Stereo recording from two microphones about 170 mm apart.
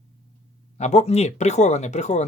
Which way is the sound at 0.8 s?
40° left (ahead or behind).